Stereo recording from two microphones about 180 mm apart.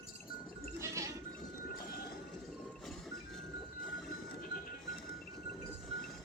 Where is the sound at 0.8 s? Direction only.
15° right (ahead or behind).